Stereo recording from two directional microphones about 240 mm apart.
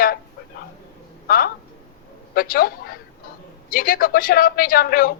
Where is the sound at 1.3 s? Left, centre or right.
Left.